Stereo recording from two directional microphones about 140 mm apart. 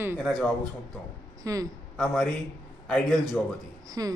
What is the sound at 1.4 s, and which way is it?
Speech, 25° right (ahead or behind).